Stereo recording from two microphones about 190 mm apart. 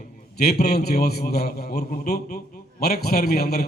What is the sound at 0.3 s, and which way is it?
A man's voice, 55° left (ahead or behind).